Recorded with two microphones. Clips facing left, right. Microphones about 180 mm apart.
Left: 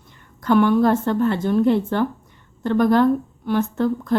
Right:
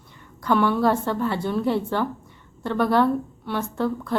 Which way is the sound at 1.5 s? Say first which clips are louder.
Left 6 dB; 15° left (ahead or behind).